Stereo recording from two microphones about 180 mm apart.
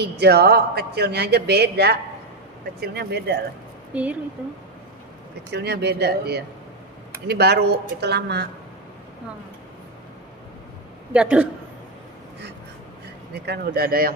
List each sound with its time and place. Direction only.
0.0 s speech: 65° right (ahead or behind)
3.9 s a woman's voice: 5° right (ahead or behind)
5.5 s speech: 65° right (ahead or behind)
11.1 s speech: 5° right (ahead or behind)
13.3 s speech: 60° right (ahead or behind)